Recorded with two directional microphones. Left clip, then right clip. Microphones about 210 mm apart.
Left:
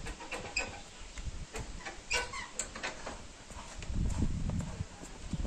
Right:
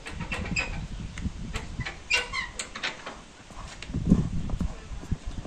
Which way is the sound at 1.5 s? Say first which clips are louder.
Right 6 dB; 40° left (ahead or behind).